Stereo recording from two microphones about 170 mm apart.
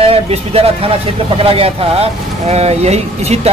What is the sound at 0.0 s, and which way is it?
Speech, 35° right (ahead or behind).